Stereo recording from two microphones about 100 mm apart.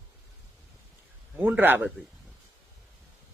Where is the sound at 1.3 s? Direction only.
20° right (ahead or behind).